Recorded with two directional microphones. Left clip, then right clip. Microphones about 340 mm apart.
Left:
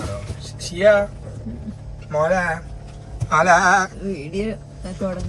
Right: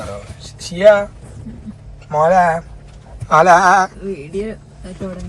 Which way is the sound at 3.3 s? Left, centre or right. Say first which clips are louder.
Right 5 dB; centre.